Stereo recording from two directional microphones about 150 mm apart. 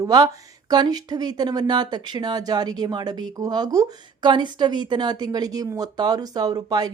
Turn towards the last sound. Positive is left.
turn(degrees=-25)  # may be behind; listen again after turning